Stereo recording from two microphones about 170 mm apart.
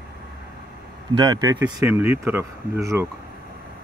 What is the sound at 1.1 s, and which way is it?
Speech, 25° right (ahead or behind).